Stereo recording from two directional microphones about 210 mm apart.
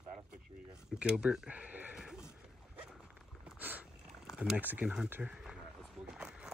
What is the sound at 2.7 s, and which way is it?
Dog, 10° right (ahead or behind).